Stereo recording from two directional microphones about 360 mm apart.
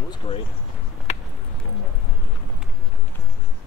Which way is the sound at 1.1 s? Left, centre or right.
Centre.